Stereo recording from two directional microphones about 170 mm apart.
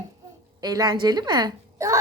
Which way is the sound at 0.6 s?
25° right (ahead or behind).